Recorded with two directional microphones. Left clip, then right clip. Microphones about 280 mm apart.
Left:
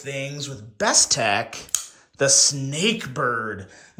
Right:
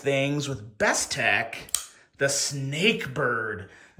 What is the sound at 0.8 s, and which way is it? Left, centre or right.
Speech, centre.